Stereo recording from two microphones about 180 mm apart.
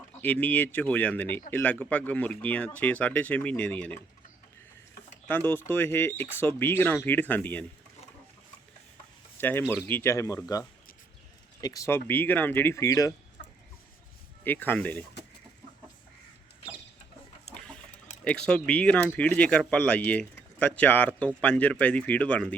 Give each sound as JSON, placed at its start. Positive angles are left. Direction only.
{"t": 0.2, "sound": "speech", "side_deg": 10}
{"t": 5.3, "sound": "speech", "side_deg": 10}
{"t": 9.4, "sound": "speech", "side_deg": 10}
{"t": 11.6, "sound": "speech", "side_deg": 20}
{"t": 14.4, "sound": "speech", "side_deg": 10}
{"t": 18.3, "sound": "speech", "side_deg": 5}